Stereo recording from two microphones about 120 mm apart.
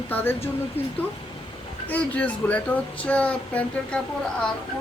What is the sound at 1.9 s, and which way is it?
Speech, 10° left (ahead or behind).